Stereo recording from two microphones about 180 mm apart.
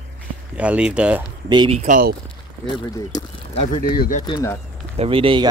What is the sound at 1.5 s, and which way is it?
Speech, 25° right (ahead or behind).